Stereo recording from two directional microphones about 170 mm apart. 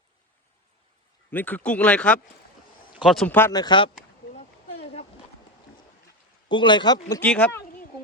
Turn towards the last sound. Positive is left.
turn(degrees=10)  # may be behind; listen again after turning